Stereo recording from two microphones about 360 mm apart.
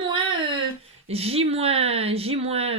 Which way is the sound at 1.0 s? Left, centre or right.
Centre.